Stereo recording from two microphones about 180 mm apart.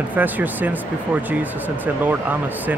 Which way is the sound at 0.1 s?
10° right (ahead or behind).